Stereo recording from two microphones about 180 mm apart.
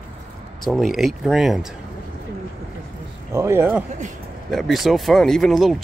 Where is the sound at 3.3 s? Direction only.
15° right (ahead or behind).